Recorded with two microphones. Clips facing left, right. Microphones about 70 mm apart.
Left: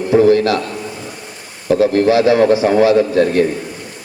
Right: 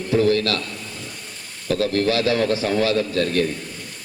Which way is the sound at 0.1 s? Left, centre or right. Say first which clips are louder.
Left 8 dB; left.